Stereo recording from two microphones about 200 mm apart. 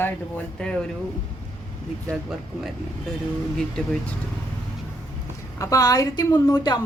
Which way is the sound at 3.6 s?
5° left (ahead or behind).